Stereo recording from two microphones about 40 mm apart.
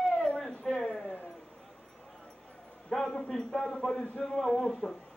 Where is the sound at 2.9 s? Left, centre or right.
Centre.